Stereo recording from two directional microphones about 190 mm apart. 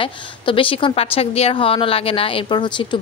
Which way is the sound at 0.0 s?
30° left (ahead or behind).